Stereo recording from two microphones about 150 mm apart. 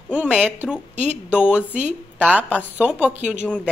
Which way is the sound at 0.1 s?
10° right (ahead or behind).